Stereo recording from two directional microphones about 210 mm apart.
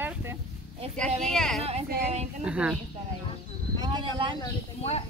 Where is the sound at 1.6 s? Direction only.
30° right (ahead or behind).